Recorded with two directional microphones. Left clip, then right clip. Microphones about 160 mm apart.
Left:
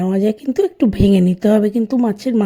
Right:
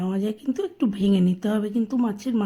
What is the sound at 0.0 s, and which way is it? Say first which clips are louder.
A woman's voice: left 10 dB; 40° left (ahead or behind).